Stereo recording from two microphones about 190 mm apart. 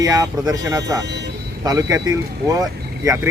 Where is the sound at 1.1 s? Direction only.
65° right (ahead or behind).